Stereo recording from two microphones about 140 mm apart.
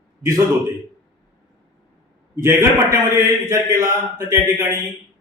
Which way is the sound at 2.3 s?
15° right (ahead or behind).